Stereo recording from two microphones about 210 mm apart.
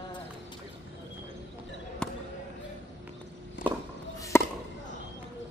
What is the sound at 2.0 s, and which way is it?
Basketball bounce, 5° left (ahead or behind).